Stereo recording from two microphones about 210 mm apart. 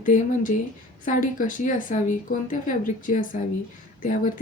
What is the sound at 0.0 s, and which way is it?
Speech, 40° left (ahead or behind).